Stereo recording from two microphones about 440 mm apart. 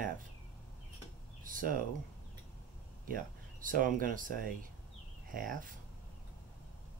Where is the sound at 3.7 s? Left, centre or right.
Centre.